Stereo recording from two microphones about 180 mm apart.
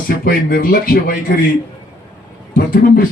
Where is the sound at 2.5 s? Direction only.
50° left (ahead or behind).